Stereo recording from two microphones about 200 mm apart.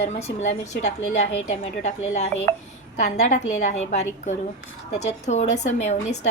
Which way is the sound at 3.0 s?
35° left (ahead or behind).